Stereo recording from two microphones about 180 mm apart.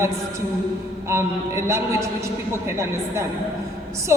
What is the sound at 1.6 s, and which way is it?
A woman's voice, 15° right (ahead or behind).